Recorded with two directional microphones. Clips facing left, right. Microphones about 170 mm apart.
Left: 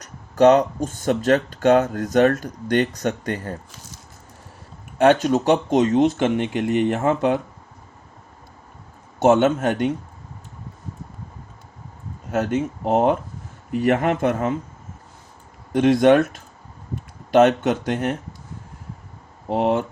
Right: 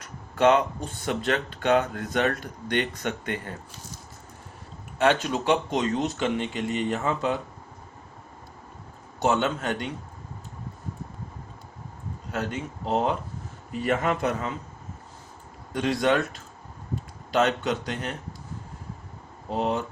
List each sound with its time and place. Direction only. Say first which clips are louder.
0.0 s speech: left 6 dB; 40° left (ahead or behind)
4.9 s speech: left 7 dB; 45° left (ahead or behind)
9.1 s speech: left 8 dB; 50° left (ahead or behind)
12.5 s speech: left 7 dB; 55° left (ahead or behind)
15.7 s speech: left 9 dB; 50° left (ahead or behind)
17.3 s speech: left 8 dB; 50° left (ahead or behind)
19.5 s speech: left 7 dB; 55° left (ahead or behind)